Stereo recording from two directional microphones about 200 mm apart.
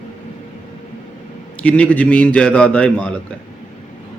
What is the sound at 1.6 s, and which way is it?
A man's voice, 5° left (ahead or behind).